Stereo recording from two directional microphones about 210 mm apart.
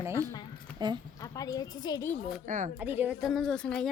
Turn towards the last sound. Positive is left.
turn(degrees=5)  # may be behind; listen again after turning